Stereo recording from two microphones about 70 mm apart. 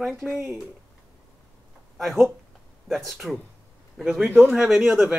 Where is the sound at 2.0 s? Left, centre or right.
Centre.